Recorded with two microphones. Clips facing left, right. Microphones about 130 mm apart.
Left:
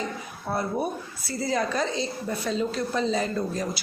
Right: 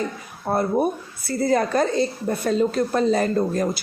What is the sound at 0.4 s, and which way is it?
A woman's voice, 50° right (ahead or behind).